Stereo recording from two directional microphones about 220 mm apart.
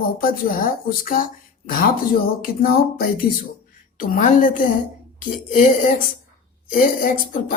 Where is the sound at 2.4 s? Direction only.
40° left (ahead or behind).